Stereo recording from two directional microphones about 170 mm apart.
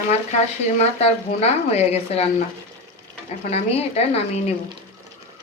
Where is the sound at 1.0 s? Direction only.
40° left (ahead or behind).